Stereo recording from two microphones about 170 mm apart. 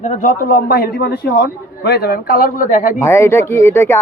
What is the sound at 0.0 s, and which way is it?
A man's voice, 50° left (ahead or behind).